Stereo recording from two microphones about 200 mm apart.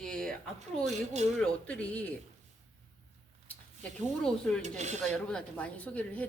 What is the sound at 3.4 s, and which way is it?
Speech, 5° left (ahead or behind).